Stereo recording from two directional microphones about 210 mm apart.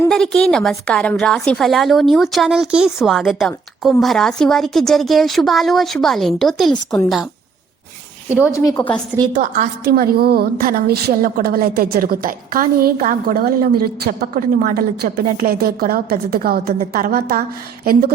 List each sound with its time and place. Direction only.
0.0 s a woman's voice: 5° left (ahead or behind)
8.3 s a woman's voice: 5° right (ahead or behind)
8.5 s a woman's voice: 15° left (ahead or behind)
9.4 s a woman's voice: 40° right (ahead or behind)